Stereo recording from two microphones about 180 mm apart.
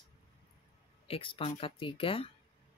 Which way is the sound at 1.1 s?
30° left (ahead or behind).